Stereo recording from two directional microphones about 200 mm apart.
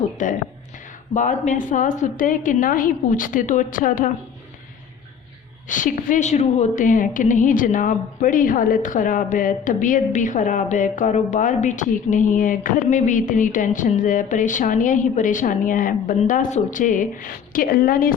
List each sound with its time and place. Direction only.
0.2 s a woman's voice: 40° left (ahead or behind)
5.6 s a woman's voice: 40° left (ahead or behind)